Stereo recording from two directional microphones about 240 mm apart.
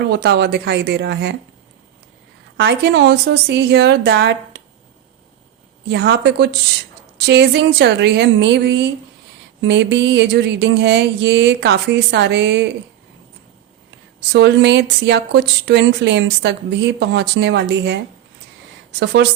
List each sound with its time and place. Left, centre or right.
0.0 s speech: right
2.6 s speech: right
5.9 s speech: right
14.3 s speech: right